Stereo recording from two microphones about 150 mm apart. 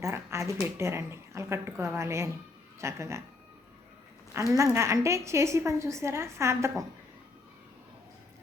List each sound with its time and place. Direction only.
0.0 s a woman's voice: 20° right (ahead or behind)
4.4 s a woman's voice: 20° right (ahead or behind)